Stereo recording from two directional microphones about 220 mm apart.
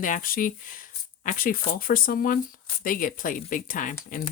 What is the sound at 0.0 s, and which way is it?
Speech, 40° left (ahead or behind).